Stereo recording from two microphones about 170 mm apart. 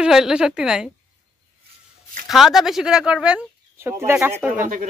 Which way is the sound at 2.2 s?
Centre (ahead or behind).